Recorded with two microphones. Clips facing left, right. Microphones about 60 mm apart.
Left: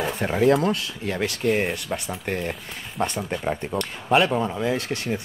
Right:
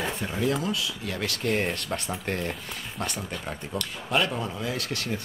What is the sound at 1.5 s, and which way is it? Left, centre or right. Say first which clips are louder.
Speech: left 3 dB; centre.